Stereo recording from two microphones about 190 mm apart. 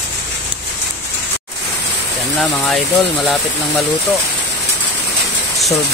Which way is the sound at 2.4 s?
Centre (ahead or behind).